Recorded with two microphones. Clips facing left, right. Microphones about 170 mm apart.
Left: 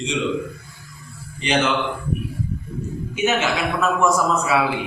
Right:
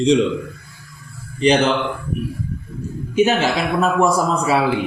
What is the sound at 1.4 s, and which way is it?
A man's voice, 35° right (ahead or behind).